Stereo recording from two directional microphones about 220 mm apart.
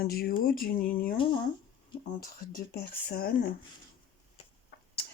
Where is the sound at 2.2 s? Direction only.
40° left (ahead or behind).